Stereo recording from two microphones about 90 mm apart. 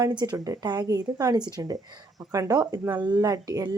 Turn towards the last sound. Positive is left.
turn(degrees=-45)  # may be behind; listen again after turning